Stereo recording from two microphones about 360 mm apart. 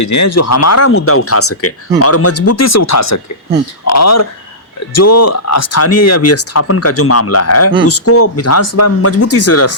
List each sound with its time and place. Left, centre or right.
0.0 s speech: left